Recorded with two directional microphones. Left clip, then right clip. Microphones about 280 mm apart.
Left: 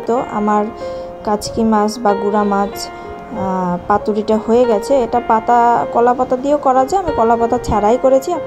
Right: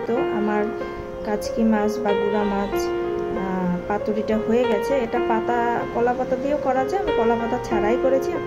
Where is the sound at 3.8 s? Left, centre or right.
Left.